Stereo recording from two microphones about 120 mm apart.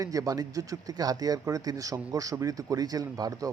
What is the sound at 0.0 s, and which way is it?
Speech, 30° right (ahead or behind).